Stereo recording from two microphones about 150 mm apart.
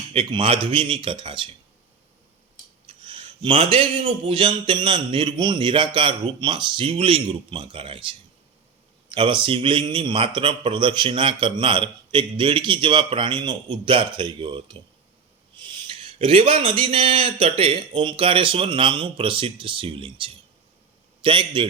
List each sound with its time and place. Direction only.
0.1 s a man's voice: 35° right (ahead or behind)
2.8 s a man's voice: 35° right (ahead or behind)
15.5 s a sound: 30° right (ahead or behind)
16.1 s a man's voice: 40° right (ahead or behind)